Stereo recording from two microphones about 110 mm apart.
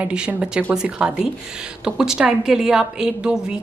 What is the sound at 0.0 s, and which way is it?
A woman's voice, 10° right (ahead or behind).